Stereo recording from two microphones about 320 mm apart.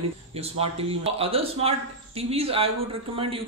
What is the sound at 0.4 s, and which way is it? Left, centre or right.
Speech, centre.